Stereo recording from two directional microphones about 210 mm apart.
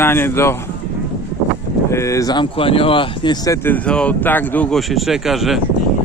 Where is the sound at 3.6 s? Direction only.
5° left (ahead or behind).